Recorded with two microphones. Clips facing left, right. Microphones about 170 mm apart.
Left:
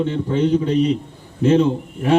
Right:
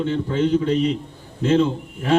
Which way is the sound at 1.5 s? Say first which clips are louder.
Left 2 dB; 15° left (ahead or behind).